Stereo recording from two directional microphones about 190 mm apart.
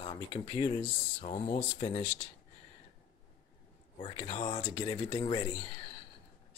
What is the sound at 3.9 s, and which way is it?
Speech, 25° left (ahead or behind).